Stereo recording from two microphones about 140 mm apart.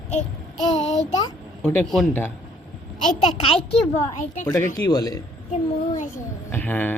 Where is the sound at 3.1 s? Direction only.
45° left (ahead or behind).